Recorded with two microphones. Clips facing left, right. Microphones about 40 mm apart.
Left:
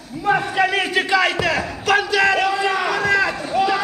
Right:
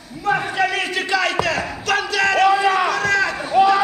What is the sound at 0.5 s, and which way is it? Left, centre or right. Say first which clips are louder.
Speech: left 2 dB; centre.